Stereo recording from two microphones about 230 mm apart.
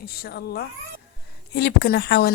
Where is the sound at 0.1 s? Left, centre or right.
Left.